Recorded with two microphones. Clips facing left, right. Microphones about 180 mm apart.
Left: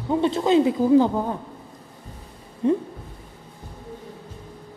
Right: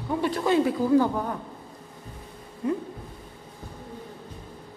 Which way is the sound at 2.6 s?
25° left (ahead or behind).